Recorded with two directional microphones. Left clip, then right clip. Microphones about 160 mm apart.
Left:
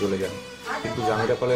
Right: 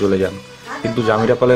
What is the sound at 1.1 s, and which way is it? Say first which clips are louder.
Speech: right 10 dB; 35° right (ahead or behind).